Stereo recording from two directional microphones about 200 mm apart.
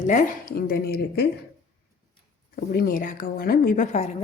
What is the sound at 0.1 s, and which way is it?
A woman's voice, 45° left (ahead or behind).